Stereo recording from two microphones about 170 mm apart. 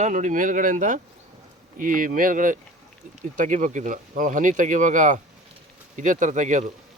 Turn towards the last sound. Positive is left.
turn(degrees=-45)  # may be behind; listen again after turning